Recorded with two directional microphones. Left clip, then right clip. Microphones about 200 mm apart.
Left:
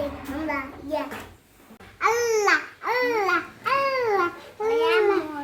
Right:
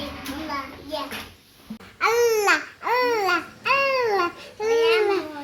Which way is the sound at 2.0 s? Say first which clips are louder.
Right 2 dB; 35° right (ahead or behind).